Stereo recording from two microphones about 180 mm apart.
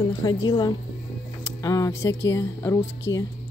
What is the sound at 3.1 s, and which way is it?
Speech, 90° left.